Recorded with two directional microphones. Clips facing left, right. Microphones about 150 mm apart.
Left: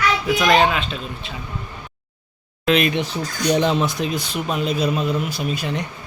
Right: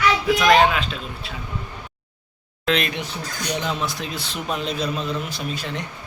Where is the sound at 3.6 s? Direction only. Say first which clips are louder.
Left 7 dB; 25° left (ahead or behind).